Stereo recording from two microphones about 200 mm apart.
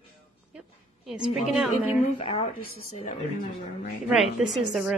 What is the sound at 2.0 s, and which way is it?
Speech, 30° left (ahead or behind).